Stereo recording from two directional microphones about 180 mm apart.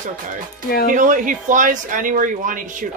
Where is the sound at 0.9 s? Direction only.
45° right (ahead or behind).